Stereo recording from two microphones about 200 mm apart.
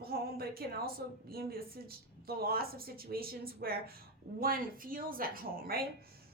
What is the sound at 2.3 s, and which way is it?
A woman's voice, 50° right (ahead or behind).